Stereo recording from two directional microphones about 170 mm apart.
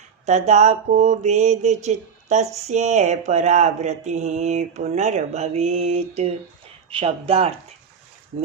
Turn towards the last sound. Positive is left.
turn(degrees=-35)  # may be behind; listen again after turning